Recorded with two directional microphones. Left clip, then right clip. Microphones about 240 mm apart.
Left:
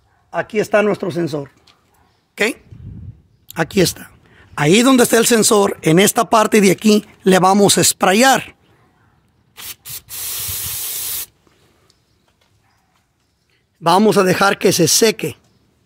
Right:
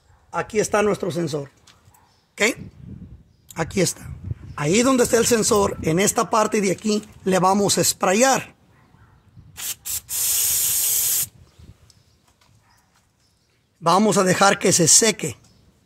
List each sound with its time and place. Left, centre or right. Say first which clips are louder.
0.3 s speech: left 5 dB; left
2.3 s speech: left 2 dB; left
4.6 s speech: left 6 dB; left
9.5 s spray: right 2 dB; centre
13.8 s speech: left 5 dB; left